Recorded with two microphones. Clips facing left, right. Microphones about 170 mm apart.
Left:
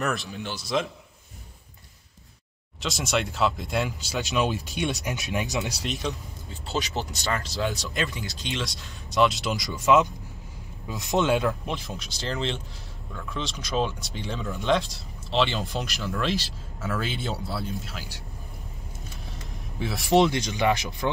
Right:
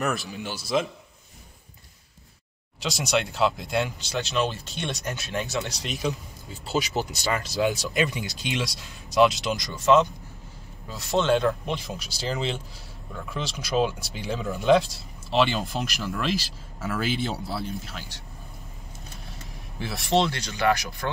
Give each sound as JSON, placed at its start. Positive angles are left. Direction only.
{"t": 0.0, "sound": "speech", "side_deg": 0}
{"t": 2.8, "sound": "speech", "side_deg": 0}
{"t": 4.3, "sound": "speech", "side_deg": 15}
{"t": 5.9, "sound": "speech", "side_deg": 0}
{"t": 6.9, "sound": "speech", "side_deg": -10}
{"t": 8.6, "sound": "speech", "side_deg": 0}
{"t": 10.9, "sound": "speech", "side_deg": 15}
{"t": 19.8, "sound": "speech", "side_deg": 0}
{"t": 20.2, "sound": "speech", "side_deg": 15}